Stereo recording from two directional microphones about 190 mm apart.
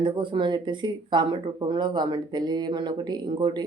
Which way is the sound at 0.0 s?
25° right (ahead or behind).